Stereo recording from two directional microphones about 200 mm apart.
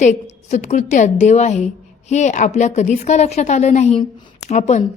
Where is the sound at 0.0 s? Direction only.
35° left (ahead or behind).